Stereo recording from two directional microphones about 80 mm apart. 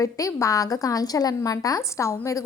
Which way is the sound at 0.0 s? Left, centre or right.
Left.